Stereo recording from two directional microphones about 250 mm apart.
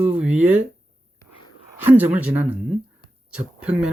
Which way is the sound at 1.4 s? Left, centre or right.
Left.